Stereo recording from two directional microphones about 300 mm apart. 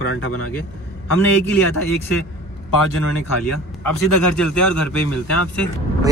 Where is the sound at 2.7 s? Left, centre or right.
Left.